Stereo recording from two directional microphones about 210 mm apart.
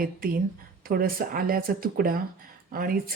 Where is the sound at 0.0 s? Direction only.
45° right (ahead or behind).